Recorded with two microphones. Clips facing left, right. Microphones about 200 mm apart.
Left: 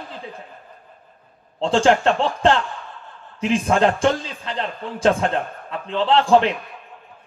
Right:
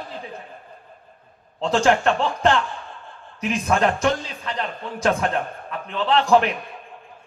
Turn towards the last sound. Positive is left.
turn(degrees=30)  # may be behind; listen again after turning